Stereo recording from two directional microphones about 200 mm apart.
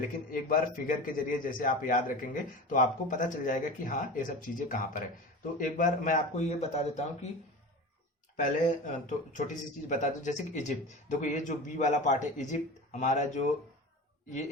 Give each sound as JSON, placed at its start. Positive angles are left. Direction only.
{"t": 0.3, "sound": "a man's voice", "side_deg": 45}
{"t": 8.4, "sound": "speech", "side_deg": 40}